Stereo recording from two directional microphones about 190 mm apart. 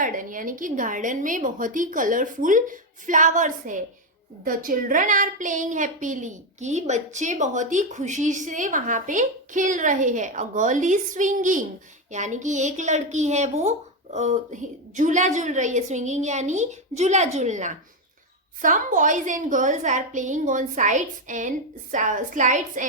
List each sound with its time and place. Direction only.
0.0 s a woman's voice: 45° right (ahead or behind)